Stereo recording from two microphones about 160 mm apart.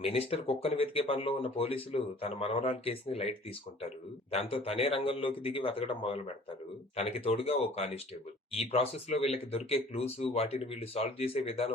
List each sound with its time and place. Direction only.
0.0 s speech: 35° left (ahead or behind)